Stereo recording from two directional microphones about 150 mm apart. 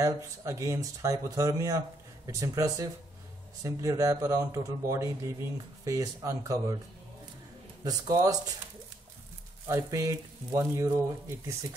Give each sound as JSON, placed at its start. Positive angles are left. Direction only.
{"t": 0.0, "sound": "speech", "side_deg": -20}
{"t": 7.8, "sound": "speech", "side_deg": -25}
{"t": 9.7, "sound": "speech", "side_deg": -20}